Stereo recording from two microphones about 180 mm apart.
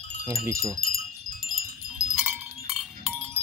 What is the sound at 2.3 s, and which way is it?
Cowbell, centre (ahead or behind).